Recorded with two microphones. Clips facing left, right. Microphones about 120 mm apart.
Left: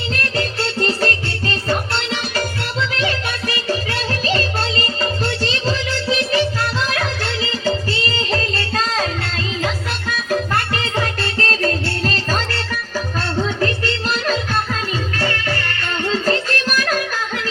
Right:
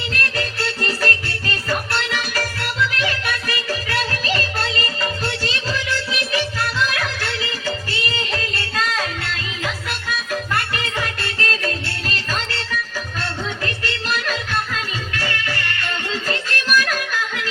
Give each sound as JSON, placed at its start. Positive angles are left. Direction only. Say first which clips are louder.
{"t": 0.1, "sound": "music", "louder": "left 3 dB", "side_deg": 25}